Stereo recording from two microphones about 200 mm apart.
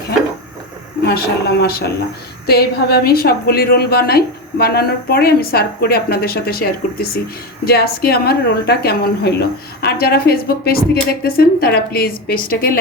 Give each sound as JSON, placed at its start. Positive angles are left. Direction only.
{"t": 1.0, "sound": "a woman's voice", "side_deg": 50}